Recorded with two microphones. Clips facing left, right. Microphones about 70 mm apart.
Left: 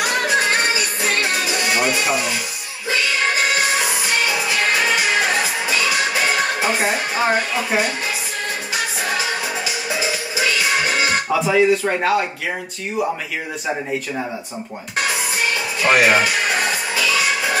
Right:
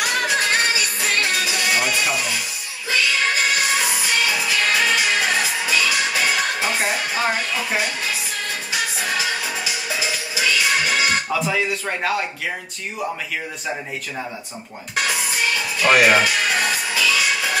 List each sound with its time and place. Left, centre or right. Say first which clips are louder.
0.4 s music: left 2 dB; centre
1.7 s music: left 3 dB; centre
4.3 s music: left 1 dB; centre
10.0 s music: left 1 dB; centre
15.8 s speech: even; centre
16.4 s music: left 1 dB; centre